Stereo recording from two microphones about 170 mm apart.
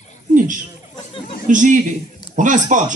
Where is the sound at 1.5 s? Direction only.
50° right (ahead or behind).